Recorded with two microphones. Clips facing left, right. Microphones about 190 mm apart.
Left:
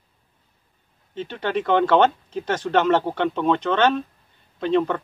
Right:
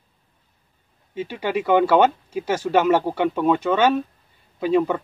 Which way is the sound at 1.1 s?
10° right (ahead or behind).